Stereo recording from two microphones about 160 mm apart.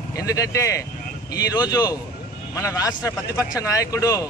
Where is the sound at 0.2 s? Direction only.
20° left (ahead or behind).